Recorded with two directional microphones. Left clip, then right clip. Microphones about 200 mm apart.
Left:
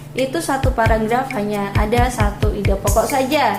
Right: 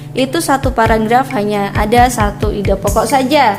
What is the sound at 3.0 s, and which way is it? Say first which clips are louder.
Speech: right 5 dB; 55° right (ahead or behind).